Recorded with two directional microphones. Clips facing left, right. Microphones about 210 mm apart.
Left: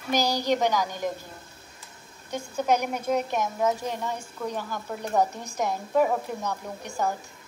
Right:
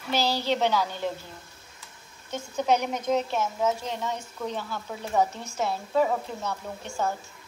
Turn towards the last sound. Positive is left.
turn(degrees=15)  # may be behind; listen again after turning